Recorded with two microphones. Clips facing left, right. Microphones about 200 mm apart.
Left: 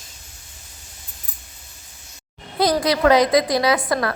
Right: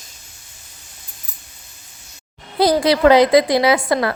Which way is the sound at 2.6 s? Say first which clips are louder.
Right 4 dB; 30° right (ahead or behind).